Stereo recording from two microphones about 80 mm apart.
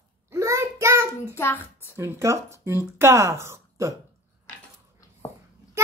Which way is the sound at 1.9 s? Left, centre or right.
Right.